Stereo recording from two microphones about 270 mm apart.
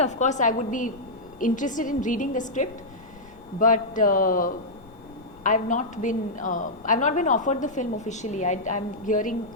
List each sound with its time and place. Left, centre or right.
0.0 s a woman's voice: left